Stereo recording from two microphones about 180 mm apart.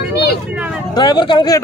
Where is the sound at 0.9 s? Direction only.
25° left (ahead or behind).